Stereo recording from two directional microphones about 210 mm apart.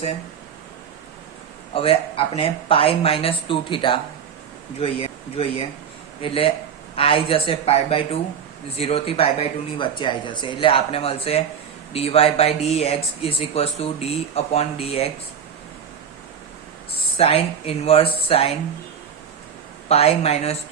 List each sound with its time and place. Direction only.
1.7 s speech: 25° left (ahead or behind)
17.2 s speech: 25° left (ahead or behind)
19.9 s speech: 30° left (ahead or behind)